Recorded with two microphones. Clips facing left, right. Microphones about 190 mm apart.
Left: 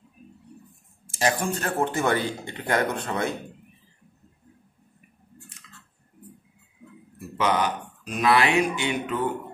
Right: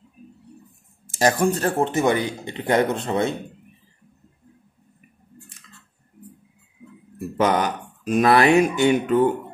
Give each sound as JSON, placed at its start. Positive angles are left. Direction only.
{"t": 1.0, "sound": "speech", "side_deg": -40}
{"t": 7.2, "sound": "speech", "side_deg": -50}